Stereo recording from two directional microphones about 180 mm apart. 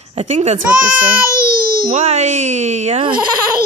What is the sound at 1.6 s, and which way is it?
Baby cry, 55° right (ahead or behind).